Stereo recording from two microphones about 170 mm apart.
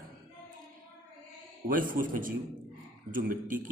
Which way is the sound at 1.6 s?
55° right (ahead or behind).